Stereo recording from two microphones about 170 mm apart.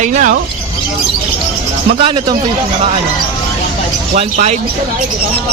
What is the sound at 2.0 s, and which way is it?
Speech, 30° right (ahead or behind).